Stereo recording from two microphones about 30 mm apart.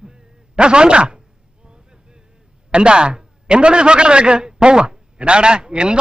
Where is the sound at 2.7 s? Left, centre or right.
Right.